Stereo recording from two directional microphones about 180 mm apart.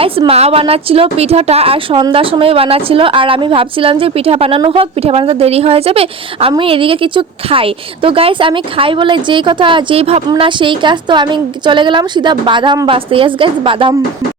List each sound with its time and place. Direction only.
0.0 s a woman's voice: 30° right (ahead or behind)